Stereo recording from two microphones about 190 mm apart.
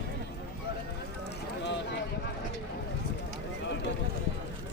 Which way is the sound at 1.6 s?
65° left (ahead or behind).